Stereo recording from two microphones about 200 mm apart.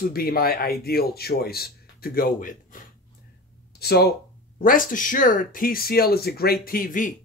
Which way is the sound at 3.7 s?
55° left (ahead or behind).